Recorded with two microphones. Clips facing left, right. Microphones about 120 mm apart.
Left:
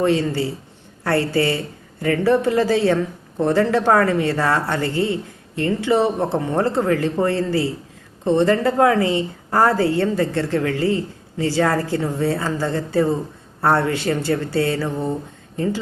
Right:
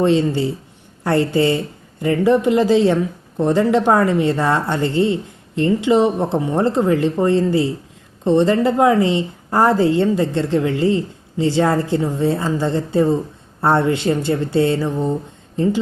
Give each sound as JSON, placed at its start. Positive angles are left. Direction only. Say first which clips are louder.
{"t": 0.0, "sound": "a woman's voice", "louder": "right 3 dB", "side_deg": -20}